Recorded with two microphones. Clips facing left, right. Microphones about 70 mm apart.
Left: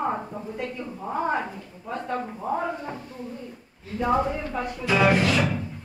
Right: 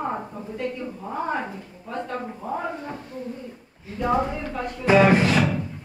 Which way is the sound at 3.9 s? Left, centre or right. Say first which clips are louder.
Even; centre.